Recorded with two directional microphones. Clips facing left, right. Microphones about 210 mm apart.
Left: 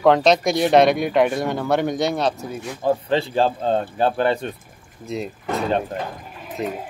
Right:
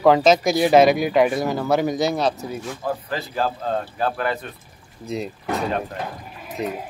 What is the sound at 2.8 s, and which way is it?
Speech, 30° left (ahead or behind).